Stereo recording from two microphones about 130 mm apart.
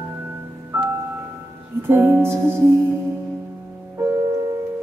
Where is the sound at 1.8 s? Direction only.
20° right (ahead or behind).